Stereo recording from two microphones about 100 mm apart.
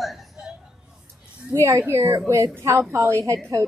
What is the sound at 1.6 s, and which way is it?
A woman's voice, 30° right (ahead or behind).